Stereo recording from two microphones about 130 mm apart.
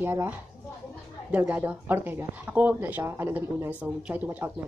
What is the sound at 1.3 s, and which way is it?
Speech, 15° right (ahead or behind).